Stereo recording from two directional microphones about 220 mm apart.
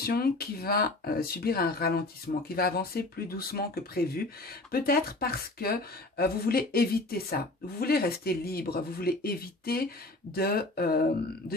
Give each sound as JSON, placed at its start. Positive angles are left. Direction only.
{"t": 0.0, "sound": "speech", "side_deg": 45}